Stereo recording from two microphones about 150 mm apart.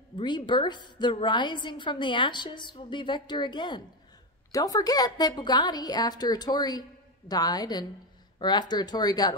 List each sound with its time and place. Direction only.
0.2 s a woman's voice: 30° left (ahead or behind)